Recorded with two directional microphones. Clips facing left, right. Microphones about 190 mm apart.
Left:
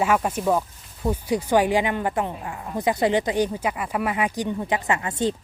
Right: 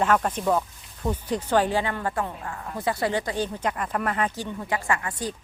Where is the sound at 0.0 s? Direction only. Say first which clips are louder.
Left 1 dB; 10° left (ahead or behind).